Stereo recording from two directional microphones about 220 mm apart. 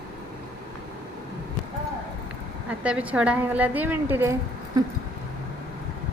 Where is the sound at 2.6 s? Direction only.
5° right (ahead or behind).